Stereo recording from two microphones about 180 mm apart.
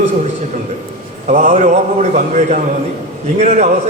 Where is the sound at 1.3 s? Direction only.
45° right (ahead or behind).